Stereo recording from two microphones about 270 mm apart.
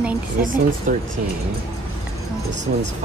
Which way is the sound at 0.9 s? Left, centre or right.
Right.